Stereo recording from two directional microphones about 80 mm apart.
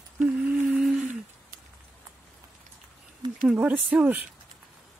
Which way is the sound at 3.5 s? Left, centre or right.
Centre.